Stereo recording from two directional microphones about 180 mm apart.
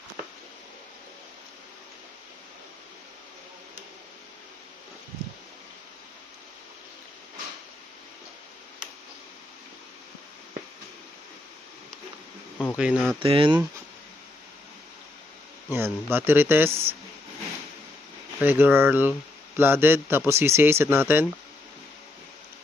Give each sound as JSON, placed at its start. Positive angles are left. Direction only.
{"t": 12.7, "sound": "speech", "side_deg": -5}
{"t": 13.2, "sound": "speech", "side_deg": -30}
{"t": 15.7, "sound": "speech", "side_deg": -15}
{"t": 18.4, "sound": "speech", "side_deg": -10}